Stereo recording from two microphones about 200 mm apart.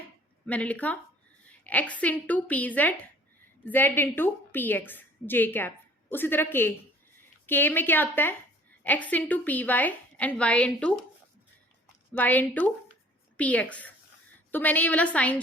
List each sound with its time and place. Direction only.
0.4 s a woman's voice: 5° left (ahead or behind)
12.1 s a woman's voice: 10° left (ahead or behind)